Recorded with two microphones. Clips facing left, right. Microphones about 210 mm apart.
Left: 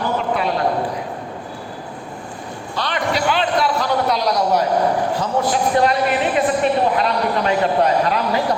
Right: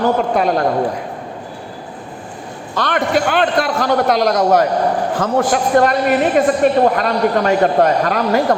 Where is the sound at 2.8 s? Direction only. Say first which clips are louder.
Right 5 dB; 50° right (ahead or behind).